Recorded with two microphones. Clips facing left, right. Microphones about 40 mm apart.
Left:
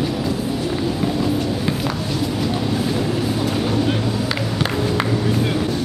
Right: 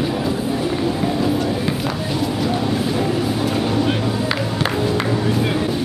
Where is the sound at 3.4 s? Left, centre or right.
Centre.